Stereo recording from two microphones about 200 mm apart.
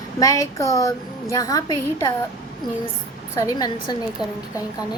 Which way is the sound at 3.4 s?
20° left (ahead or behind).